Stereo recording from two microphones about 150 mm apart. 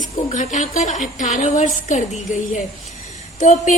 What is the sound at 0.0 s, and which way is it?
A woman's voice, 55° left (ahead or behind).